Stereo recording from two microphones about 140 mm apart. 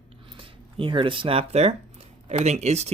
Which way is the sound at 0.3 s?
40° right (ahead or behind).